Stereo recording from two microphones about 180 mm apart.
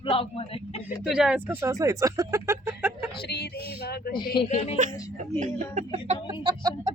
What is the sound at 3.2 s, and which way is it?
Speech, 60° left (ahead or behind).